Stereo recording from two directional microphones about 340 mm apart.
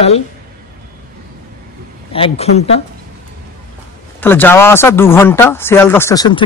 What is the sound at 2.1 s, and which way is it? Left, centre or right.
Speech, centre.